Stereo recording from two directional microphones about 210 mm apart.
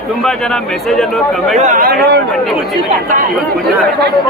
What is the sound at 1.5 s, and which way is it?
Speech, 35° right (ahead or behind).